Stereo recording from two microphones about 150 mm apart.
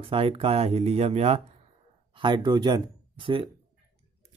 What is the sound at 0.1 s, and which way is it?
Speech, 40° right (ahead or behind).